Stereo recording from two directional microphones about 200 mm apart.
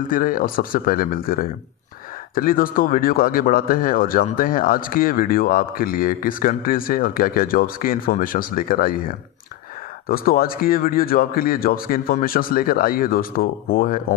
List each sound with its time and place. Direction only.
0.1 s speech: 45° left (ahead or behind)